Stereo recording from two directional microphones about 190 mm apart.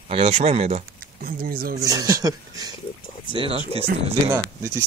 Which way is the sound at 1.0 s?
50° right (ahead or behind).